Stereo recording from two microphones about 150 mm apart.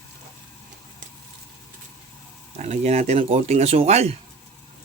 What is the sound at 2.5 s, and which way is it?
Speech, 50° right (ahead or behind).